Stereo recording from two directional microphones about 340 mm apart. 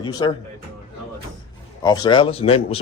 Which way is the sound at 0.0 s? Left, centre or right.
Centre.